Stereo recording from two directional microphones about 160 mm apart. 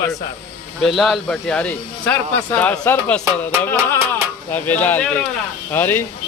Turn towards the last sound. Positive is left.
turn(degrees=15)  # may be behind; listen again after turning